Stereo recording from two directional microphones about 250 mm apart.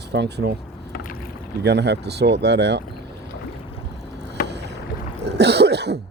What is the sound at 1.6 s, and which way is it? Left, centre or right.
Speech, right.